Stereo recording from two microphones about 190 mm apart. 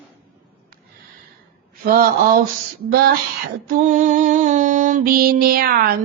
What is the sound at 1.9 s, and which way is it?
Mantra, 50° right (ahead or behind).